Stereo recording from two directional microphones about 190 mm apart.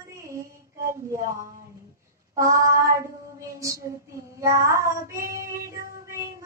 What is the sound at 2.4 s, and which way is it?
Child singing, 15° right (ahead or behind).